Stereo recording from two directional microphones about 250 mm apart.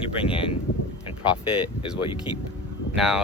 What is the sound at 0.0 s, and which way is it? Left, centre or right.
Speech, left.